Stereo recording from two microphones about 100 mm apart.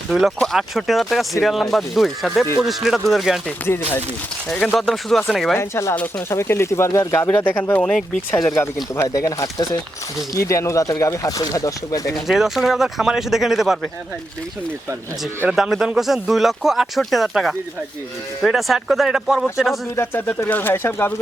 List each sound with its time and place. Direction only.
0.1 s speech: centre (ahead or behind)
4.8 s speech: centre (ahead or behind)
5.5 s speech: 25° left (ahead or behind); by 8.4 s 5° left (ahead or behind)
8.4 s speech: 25° left (ahead or behind)
9.0 s speech: 35° left (ahead or behind)
12.1 s speech: 5° right (ahead or behind)
15.4 s speech: 5° right (ahead or behind)
20.0 s speech: 25° left (ahead or behind)